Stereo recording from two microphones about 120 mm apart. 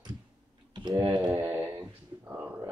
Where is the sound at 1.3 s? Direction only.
20° right (ahead or behind).